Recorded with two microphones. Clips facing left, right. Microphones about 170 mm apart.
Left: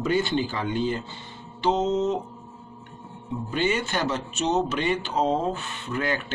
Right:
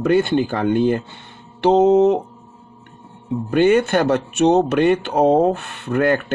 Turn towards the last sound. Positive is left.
turn(degrees=-55)  # may be behind; listen again after turning